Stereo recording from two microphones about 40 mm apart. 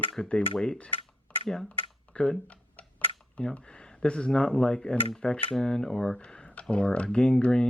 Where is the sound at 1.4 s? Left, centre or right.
Centre.